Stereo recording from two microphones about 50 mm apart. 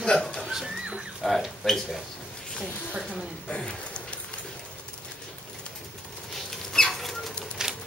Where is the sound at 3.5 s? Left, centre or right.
Centre.